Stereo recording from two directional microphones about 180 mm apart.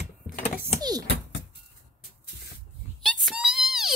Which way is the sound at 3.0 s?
Centre (ahead or behind).